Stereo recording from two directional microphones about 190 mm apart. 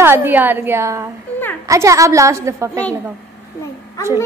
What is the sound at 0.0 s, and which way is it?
A woman's voice, 10° right (ahead or behind).